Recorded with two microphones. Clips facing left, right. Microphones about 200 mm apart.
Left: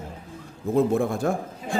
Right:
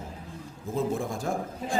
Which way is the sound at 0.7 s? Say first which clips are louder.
Left 7 dB; 60° left (ahead or behind).